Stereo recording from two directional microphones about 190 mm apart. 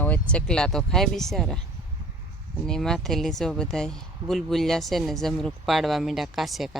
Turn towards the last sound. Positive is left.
turn(degrees=0)  # may be behind; listen again after turning